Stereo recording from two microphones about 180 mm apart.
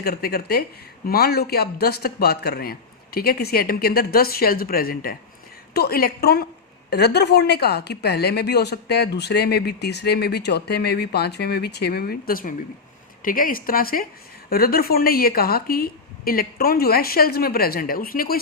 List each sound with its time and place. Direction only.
0.0 s a woman's voice: 60° left (ahead or behind)